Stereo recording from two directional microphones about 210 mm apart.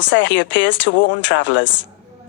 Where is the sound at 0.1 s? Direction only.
60° left (ahead or behind).